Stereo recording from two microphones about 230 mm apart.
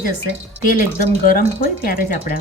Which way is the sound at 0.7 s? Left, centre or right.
Left.